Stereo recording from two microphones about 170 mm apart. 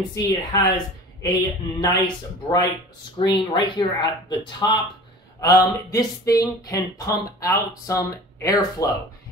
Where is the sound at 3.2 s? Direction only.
30° left (ahead or behind).